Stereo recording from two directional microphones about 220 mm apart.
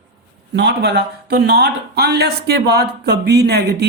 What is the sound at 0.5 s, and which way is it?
Speech, 50° right (ahead or behind).